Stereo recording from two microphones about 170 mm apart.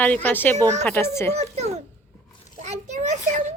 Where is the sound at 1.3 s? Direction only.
40° right (ahead or behind).